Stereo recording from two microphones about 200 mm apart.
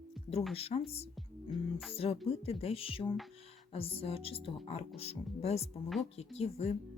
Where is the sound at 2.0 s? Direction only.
30° left (ahead or behind).